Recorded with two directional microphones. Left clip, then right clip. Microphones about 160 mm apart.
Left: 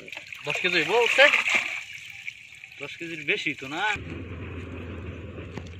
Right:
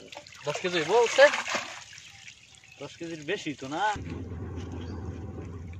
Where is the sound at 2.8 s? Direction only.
45° right (ahead or behind).